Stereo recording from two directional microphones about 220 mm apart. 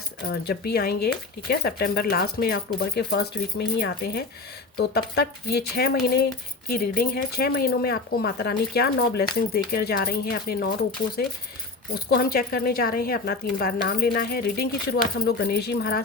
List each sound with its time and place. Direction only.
0.3 s a woman's voice: 45° left (ahead or behind)
12.1 s a woman's voice: 45° left (ahead or behind)